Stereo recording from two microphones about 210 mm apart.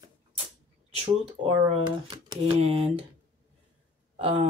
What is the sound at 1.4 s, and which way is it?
Speech, 25° right (ahead or behind).